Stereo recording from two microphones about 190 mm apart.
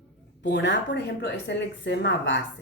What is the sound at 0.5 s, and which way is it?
Speech, 70° left (ahead or behind).